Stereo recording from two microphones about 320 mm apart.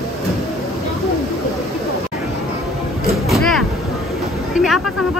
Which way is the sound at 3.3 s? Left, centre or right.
Centre.